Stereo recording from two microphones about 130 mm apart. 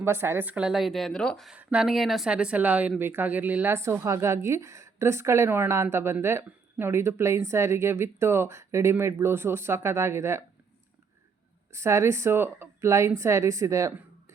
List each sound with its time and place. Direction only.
0.0 s speech: 20° right (ahead or behind); by 1.5 s 5° left (ahead or behind)
1.5 s a woman's voice: 5° right (ahead or behind)
11.7 s a woman's voice: 20° right (ahead or behind)